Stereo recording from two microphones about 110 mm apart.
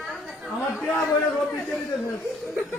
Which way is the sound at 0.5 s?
5° right (ahead or behind).